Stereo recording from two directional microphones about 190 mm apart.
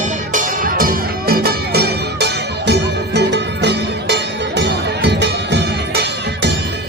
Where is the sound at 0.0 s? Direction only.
40° right (ahead or behind).